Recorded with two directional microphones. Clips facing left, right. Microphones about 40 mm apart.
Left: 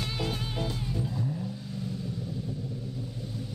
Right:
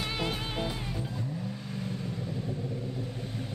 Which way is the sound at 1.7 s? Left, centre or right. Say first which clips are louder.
Even; right.